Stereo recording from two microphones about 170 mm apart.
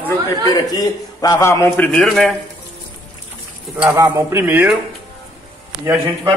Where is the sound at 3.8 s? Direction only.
15° right (ahead or behind).